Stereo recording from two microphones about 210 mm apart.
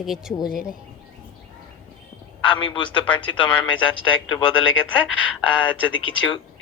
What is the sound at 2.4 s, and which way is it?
Speech, 25° left (ahead or behind).